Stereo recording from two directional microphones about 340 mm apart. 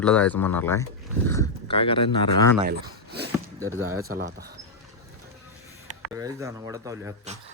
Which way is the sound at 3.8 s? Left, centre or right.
Right.